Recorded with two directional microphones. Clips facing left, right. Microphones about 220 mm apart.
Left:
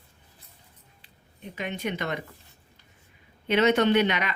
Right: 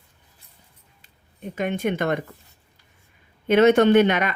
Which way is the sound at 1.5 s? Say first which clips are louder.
Right 7 dB; 50° right (ahead or behind).